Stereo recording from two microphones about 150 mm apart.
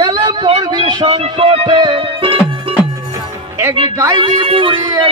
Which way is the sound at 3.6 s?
20° right (ahead or behind).